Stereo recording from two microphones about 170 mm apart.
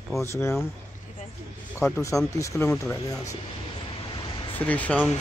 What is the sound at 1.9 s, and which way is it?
Speech, 20° left (ahead or behind).